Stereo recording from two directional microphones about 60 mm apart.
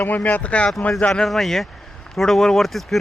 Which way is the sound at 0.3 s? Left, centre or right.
Left.